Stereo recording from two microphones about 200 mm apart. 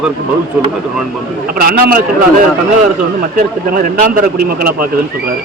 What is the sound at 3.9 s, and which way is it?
Speech, 45° right (ahead or behind).